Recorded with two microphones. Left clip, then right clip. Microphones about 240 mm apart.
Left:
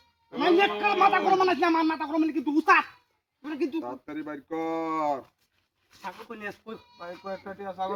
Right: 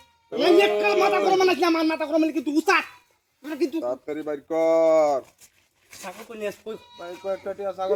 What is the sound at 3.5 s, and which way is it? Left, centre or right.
Speech, left.